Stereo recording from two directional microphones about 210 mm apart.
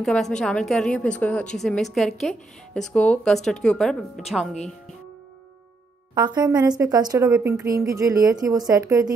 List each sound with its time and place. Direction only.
0.0 s a woman's voice: 5° left (ahead or behind)
6.1 s speech: 20° right (ahead or behind)